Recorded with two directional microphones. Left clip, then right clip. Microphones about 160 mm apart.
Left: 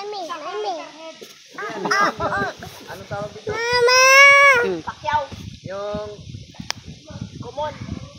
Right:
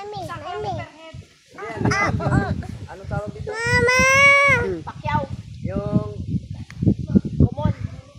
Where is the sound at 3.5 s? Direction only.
25° left (ahead or behind).